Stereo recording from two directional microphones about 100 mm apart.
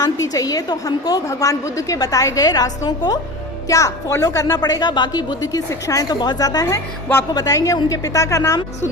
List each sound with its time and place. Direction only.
0.0 s a woman's voice: 35° left (ahead or behind)